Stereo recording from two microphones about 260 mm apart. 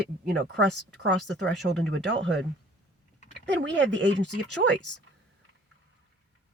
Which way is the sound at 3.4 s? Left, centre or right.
Right.